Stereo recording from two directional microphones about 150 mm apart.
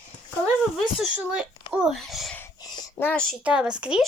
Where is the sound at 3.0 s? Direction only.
15° left (ahead or behind).